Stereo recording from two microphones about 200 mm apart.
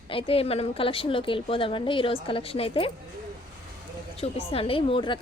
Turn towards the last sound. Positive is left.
turn(degrees=25)  # may be behind; listen again after turning